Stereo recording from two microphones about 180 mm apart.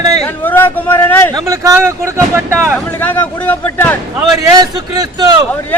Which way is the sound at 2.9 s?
10° left (ahead or behind).